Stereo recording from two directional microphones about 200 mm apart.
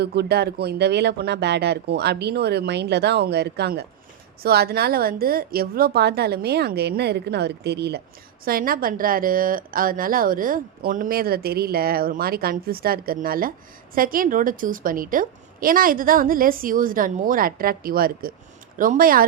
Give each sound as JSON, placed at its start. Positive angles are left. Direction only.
{"t": 0.0, "sound": "a woman's voice", "side_deg": -55}